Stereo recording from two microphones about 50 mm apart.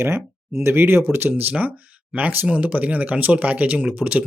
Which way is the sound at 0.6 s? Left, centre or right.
Right.